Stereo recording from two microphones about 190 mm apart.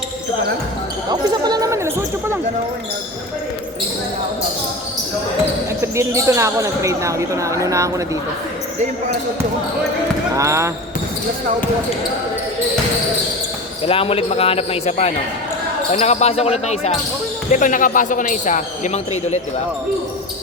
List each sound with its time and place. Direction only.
1.1 s speech: 20° right (ahead or behind)
5.8 s speech: 15° right (ahead or behind)
10.3 s speech: 15° right (ahead or behind)
13.8 s speech: 30° left (ahead or behind)